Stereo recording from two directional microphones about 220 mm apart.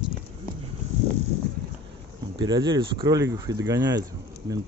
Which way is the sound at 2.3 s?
20° right (ahead or behind).